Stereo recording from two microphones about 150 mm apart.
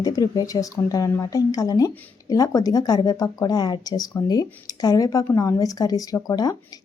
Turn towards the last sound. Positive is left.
turn(degrees=25)  # may be behind; listen again after turning